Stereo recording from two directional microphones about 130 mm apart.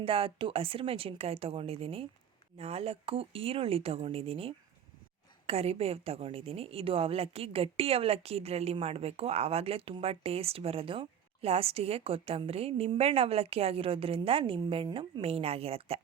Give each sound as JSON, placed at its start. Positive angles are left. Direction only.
{"t": 0.0, "sound": "a woman's voice", "side_deg": -45}